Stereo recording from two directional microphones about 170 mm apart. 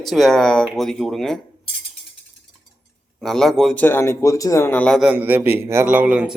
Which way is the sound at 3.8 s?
15° left (ahead or behind).